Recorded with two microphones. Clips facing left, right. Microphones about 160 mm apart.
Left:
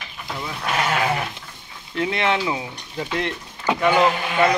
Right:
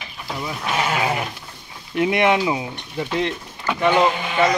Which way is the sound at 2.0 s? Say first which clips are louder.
Right 4 dB; 15° right (ahead or behind).